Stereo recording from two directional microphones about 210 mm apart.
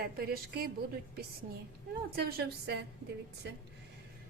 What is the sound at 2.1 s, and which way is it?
Speech, 45° right (ahead or behind).